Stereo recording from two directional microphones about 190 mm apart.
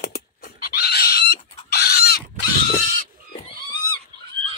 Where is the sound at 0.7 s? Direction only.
55° left (ahead or behind).